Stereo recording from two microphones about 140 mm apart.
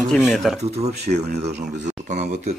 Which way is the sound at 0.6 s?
50° right (ahead or behind).